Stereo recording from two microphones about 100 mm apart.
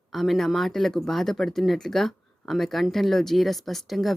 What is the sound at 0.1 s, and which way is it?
A woman's voice, centre (ahead or behind).